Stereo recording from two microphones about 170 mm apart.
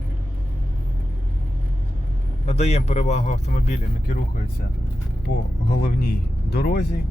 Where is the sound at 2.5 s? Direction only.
40° left (ahead or behind).